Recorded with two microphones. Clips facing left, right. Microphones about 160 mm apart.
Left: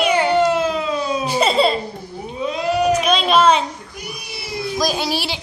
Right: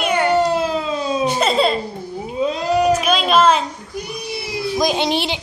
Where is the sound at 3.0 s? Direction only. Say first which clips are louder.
Even; centre (ahead or behind).